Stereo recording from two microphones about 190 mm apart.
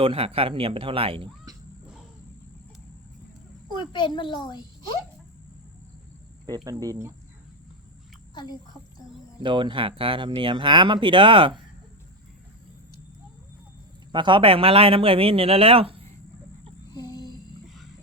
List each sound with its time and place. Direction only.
0.0 s speech: 30° right (ahead or behind)
3.8 s a child's voice: 25° left (ahead or behind)
6.7 s speech: 20° right (ahead or behind)
9.4 s speech: 25° right (ahead or behind)
14.1 s speech: 25° right (ahead or behind)
16.9 s a sound: 20° left (ahead or behind)